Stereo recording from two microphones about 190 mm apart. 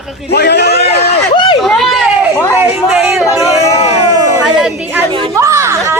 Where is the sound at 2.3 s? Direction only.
15° left (ahead or behind).